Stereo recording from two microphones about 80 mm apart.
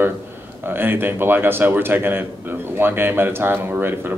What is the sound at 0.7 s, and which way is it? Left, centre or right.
Speech, right.